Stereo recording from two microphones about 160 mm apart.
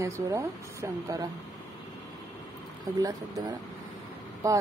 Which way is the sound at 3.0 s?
25° right (ahead or behind).